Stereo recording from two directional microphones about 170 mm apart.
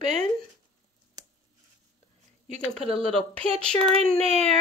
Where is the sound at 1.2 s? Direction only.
20° right (ahead or behind).